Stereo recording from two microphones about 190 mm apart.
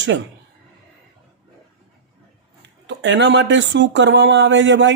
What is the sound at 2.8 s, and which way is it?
Speech, 70° right (ahead or behind).